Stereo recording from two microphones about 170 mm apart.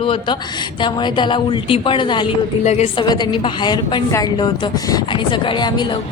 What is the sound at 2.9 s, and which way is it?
A woman's voice, 25° left (ahead or behind).